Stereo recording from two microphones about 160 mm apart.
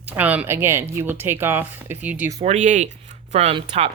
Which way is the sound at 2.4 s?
50° right (ahead or behind).